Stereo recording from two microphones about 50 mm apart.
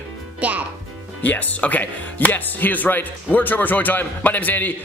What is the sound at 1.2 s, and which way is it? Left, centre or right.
Speech, left.